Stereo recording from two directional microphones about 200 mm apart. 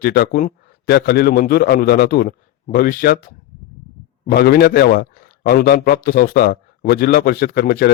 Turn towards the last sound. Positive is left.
turn(degrees=50)  # may be behind; listen again after turning